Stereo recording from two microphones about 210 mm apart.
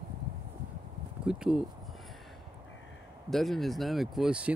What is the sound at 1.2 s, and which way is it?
Speech, 5° right (ahead or behind).